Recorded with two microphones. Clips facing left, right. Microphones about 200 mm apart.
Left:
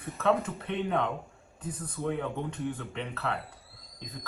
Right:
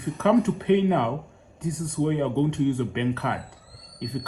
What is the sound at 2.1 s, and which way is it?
Speech, 80° right.